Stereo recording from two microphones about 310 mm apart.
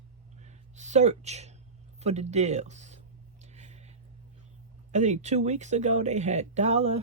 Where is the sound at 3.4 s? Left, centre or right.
Right.